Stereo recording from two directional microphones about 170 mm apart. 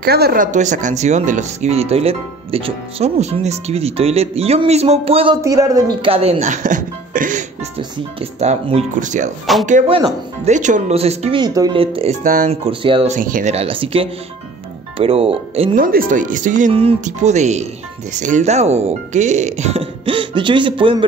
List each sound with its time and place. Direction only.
0.0 s speech: 65° right (ahead or behind); by 5.4 s 35° right (ahead or behind)
5.4 s speech: 20° right (ahead or behind)
6.0 s speech: 35° right (ahead or behind)
8.2 s speech: 35° right (ahead or behind)
9.8 s speech: 35° right (ahead or behind)
10.5 s speech: 45° right (ahead or behind); by 11.8 s 25° right (ahead or behind)
11.8 s speech: 35° right (ahead or behind)
12.2 s speech: 50° right (ahead or behind)
12.4 s speech: 35° right (ahead or behind)
13.1 s speech: 50° right (ahead or behind)
15.7 s speech: 55° right (ahead or behind)
16.7 s speech: 40° right (ahead or behind)